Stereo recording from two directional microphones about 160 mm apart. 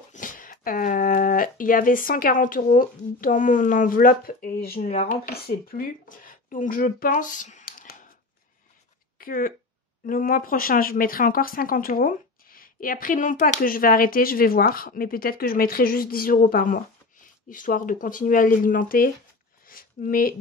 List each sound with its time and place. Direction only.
0.1 s speech: 55° left (ahead or behind)
4.8 s speech: 55° left (ahead or behind)
9.2 s speech: 60° left (ahead or behind)
19.6 s a sound: 60° left (ahead or behind)